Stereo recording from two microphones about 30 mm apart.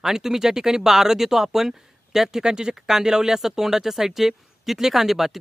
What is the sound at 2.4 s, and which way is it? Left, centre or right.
Speech, right.